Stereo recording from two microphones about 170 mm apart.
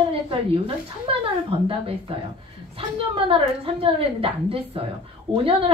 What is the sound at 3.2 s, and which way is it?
A woman's voice, 35° right (ahead or behind).